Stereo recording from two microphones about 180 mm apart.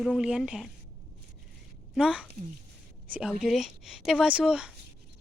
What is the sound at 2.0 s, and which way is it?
Speech, 5° right (ahead or behind).